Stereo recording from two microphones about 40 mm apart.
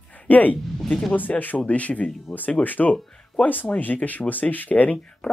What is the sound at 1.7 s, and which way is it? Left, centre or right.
Speech, left.